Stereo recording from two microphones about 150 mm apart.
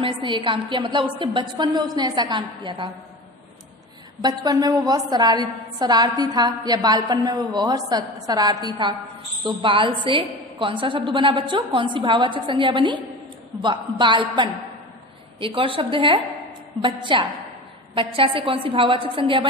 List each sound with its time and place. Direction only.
0.0 s a woman's voice: 35° right (ahead or behind)
4.2 s a woman's voice: 25° right (ahead or behind)